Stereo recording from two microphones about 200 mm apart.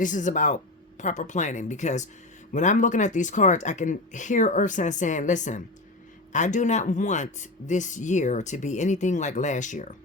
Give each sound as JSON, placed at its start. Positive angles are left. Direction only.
{"t": 0.0, "sound": "speech", "side_deg": 40}